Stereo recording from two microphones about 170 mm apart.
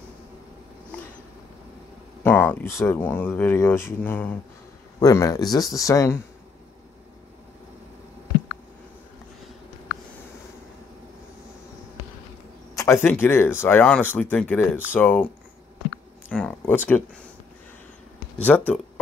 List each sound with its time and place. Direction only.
2.2 s speech: 10° left (ahead or behind)
5.0 s speech: 20° left (ahead or behind)
12.7 s speech: 15° left (ahead or behind)
16.3 s a sound: 5° left (ahead or behind)
18.5 s speech: 5° left (ahead or behind)